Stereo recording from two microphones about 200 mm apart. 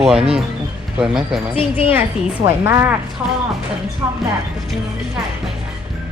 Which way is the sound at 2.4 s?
15° right (ahead or behind).